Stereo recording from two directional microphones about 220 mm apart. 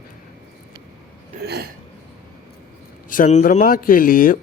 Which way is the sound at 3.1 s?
35° left (ahead or behind).